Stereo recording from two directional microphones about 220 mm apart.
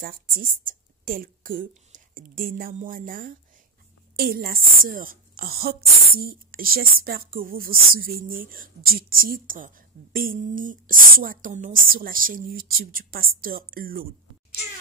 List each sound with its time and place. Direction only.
0.0 s a woman's voice: 40° right (ahead or behind)